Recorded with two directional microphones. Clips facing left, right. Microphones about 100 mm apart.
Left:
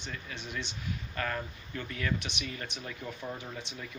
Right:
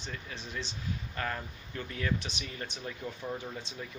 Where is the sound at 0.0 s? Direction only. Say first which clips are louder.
Left 1 dB; 35° right (ahead or behind).